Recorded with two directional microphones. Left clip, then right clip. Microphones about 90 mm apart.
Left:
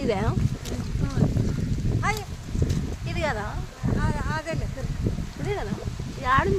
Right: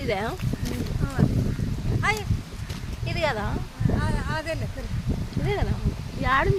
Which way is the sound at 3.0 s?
15° left (ahead or behind).